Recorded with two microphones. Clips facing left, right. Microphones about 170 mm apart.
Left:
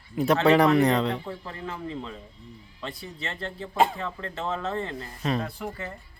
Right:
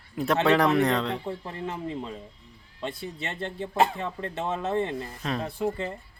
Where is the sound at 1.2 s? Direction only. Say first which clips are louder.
Right 3 dB; 20° right (ahead or behind).